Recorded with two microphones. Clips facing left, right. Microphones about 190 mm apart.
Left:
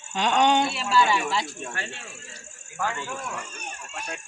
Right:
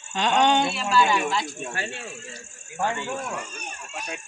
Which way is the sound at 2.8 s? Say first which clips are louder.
Right 3 dB; 20° right (ahead or behind).